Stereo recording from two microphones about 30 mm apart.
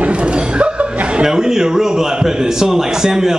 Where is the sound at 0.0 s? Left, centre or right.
Right.